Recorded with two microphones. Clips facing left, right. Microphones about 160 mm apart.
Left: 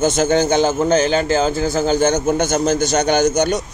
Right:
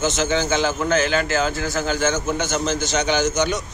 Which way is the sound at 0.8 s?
35° left (ahead or behind).